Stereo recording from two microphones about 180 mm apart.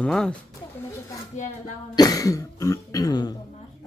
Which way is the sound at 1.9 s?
20° left (ahead or behind).